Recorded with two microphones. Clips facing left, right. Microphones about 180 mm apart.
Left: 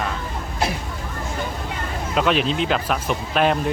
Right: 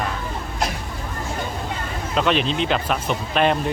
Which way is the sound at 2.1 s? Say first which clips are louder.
Even; 5° left (ahead or behind).